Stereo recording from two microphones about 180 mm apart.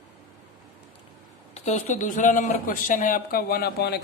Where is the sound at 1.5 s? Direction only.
40° left (ahead or behind).